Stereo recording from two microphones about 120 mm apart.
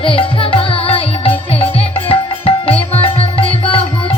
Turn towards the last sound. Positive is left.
turn(degrees=50)  # may be behind; listen again after turning